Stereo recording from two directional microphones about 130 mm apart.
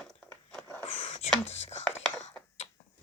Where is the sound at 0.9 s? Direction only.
55° left (ahead or behind).